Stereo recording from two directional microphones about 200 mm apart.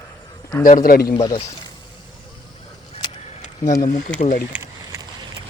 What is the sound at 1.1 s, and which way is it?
Speech, 20° left (ahead or behind).